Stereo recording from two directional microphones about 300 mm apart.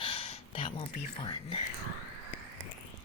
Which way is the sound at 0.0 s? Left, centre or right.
Centre.